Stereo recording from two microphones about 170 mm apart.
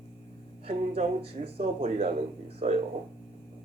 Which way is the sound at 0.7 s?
35° right (ahead or behind).